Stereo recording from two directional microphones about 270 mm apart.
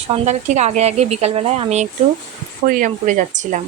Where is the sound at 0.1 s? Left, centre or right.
Right.